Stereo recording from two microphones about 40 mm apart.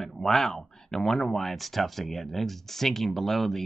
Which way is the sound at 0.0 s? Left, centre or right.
Centre.